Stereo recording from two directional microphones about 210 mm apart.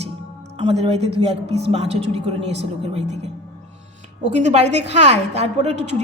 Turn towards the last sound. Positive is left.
turn(degrees=-30)  # may be behind; listen again after turning